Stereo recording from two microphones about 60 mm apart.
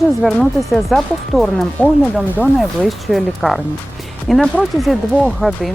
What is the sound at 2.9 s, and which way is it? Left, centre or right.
Speech, centre.